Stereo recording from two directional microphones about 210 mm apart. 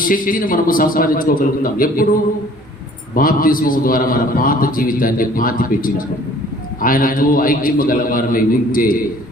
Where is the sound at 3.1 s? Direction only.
40° left (ahead or behind).